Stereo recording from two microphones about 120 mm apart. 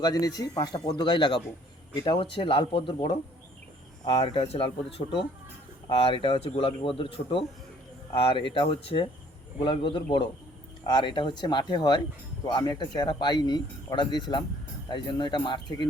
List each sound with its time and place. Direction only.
0.0 s speech: 30° left (ahead or behind)